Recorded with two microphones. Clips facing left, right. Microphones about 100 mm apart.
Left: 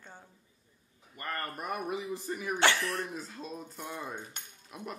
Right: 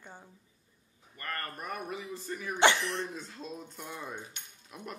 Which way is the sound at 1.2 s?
20° left (ahead or behind).